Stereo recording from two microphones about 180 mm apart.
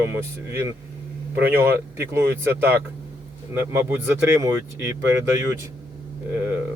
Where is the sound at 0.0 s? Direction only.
15° right (ahead or behind).